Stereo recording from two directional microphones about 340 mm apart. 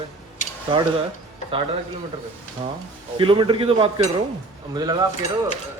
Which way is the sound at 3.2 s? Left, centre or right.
Centre.